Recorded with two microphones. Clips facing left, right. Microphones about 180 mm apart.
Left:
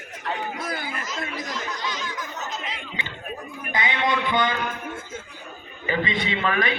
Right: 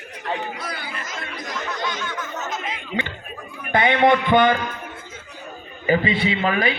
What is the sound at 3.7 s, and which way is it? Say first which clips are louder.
Music: right 8 dB; 60° right (ahead or behind).